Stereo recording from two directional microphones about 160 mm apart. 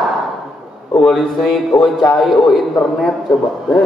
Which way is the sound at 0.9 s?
Centre (ahead or behind).